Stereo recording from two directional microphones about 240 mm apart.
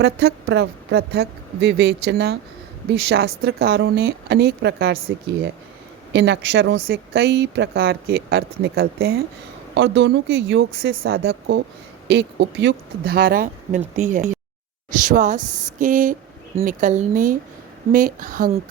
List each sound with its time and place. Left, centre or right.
0.0 s speech: right
6.1 s speech: right